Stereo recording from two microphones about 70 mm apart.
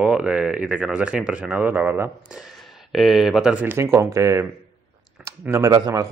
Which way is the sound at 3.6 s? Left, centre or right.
Right.